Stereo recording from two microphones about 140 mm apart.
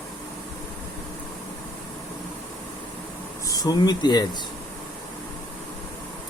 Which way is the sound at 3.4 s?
25° left (ahead or behind).